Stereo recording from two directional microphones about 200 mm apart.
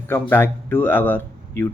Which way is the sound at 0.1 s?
10° left (ahead or behind).